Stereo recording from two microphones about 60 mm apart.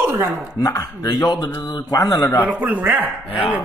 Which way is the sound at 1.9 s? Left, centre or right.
Left.